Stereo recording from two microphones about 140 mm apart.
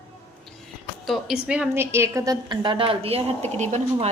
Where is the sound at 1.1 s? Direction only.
5° right (ahead or behind).